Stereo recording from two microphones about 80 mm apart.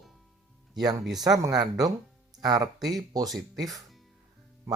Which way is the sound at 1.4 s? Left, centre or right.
Right.